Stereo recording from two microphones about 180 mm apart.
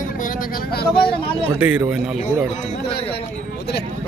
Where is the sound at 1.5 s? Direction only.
10° right (ahead or behind).